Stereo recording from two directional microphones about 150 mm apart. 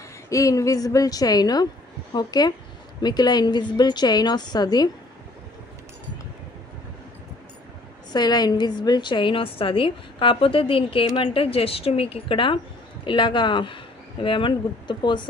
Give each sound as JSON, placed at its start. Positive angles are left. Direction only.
{"t": 0.3, "sound": "a woman's voice", "side_deg": 20}
{"t": 8.1, "sound": "a woman's voice", "side_deg": 30}